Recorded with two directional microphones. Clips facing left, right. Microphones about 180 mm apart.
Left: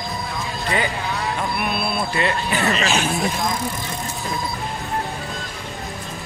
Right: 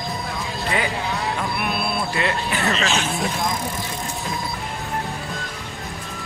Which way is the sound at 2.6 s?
15° left (ahead or behind).